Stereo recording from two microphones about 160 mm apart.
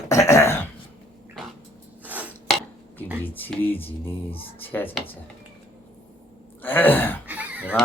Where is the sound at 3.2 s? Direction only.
10° left (ahead or behind).